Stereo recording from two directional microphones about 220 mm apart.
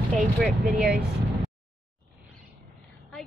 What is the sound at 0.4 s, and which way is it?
Speech, centre (ahead or behind).